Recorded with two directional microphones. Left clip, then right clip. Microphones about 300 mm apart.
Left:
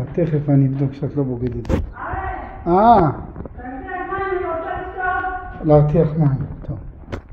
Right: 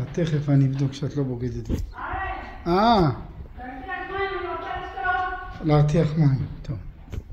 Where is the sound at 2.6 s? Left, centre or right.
Right.